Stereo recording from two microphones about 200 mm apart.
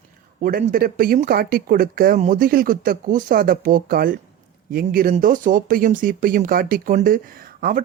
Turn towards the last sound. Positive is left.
turn(degrees=-45)  # may be behind; listen again after turning